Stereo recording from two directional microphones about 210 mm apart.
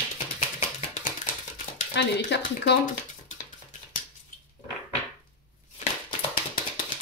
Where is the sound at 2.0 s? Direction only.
55° left (ahead or behind).